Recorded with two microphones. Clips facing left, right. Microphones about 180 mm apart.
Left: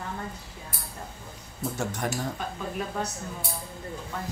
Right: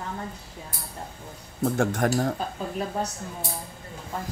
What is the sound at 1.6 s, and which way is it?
Speech, 55° right (ahead or behind).